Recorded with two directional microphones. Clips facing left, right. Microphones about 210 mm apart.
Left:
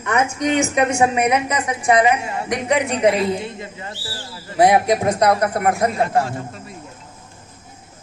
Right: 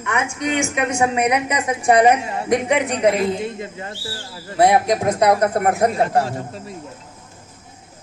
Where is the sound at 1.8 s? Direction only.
40° right (ahead or behind).